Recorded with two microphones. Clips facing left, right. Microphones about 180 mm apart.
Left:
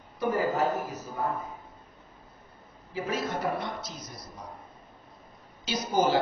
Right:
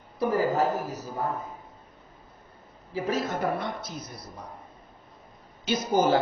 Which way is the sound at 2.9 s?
40° right (ahead or behind).